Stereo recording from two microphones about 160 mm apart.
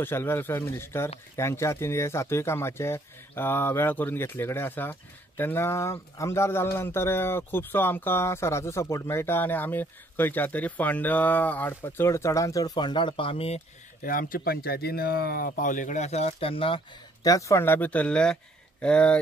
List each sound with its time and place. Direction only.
0.0 s speech: 15° left (ahead or behind); by 13.6 s 35° left (ahead or behind)
14.0 s speech: 60° left (ahead or behind); by 16.8 s 35° left (ahead or behind)
17.2 s speech: 20° left (ahead or behind)